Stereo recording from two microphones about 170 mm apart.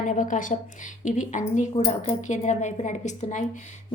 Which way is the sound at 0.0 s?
50° left (ahead or behind).